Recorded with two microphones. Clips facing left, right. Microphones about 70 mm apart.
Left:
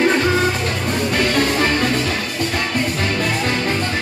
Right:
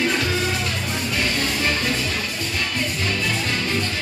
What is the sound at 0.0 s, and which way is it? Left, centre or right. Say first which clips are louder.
Music: left 6 dB; left.